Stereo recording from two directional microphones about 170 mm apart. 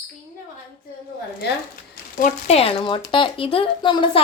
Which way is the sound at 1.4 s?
75° left (ahead or behind).